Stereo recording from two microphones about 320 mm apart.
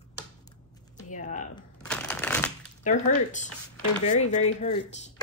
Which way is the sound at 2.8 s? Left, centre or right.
Left.